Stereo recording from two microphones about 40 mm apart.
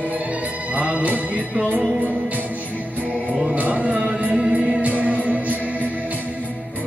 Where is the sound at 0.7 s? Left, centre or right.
Right.